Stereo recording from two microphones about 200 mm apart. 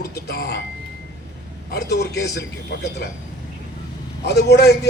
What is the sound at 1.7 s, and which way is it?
Speech, 55° left (ahead or behind).